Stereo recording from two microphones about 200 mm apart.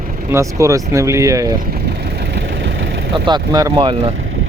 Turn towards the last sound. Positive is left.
turn(degrees=-25)  # may be behind; listen again after turning